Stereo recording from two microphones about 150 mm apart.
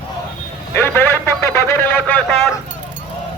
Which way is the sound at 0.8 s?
15° left (ahead or behind).